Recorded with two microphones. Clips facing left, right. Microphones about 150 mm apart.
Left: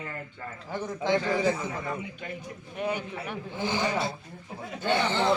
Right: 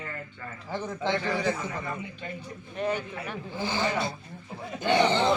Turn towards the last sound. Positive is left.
turn(degrees=-20)  # may be behind; listen again after turning